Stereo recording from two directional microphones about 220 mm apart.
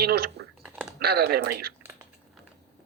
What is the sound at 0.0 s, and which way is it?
Speech, 45° right (ahead or behind).